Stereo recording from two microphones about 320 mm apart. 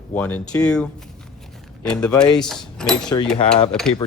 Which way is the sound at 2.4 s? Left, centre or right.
Centre.